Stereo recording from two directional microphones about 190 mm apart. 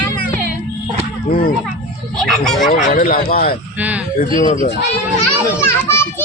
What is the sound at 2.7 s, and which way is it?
Speech, 45° left (ahead or behind).